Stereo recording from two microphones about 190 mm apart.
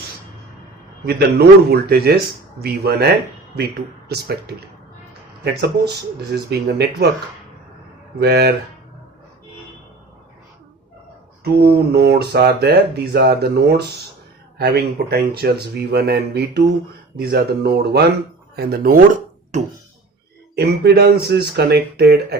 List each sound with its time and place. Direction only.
1.0 s speech: 55° right (ahead or behind)
5.4 s speech: 60° right (ahead or behind)
8.2 s speech: 60° right (ahead or behind)
11.4 s speech: 55° right (ahead or behind)
19.5 s a sound: 40° right (ahead or behind)
20.6 s speech: 55° right (ahead or behind)